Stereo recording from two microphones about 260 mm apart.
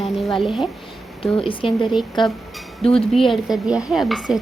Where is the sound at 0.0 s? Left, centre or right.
Centre.